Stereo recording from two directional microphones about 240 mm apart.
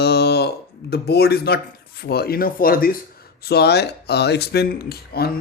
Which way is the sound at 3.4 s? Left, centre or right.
Left.